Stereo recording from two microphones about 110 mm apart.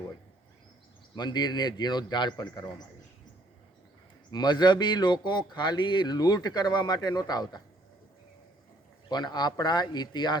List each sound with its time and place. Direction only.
1.1 s speech: 40° left (ahead or behind)
4.3 s speech: 40° left (ahead or behind)
9.0 s speech: 40° left (ahead or behind)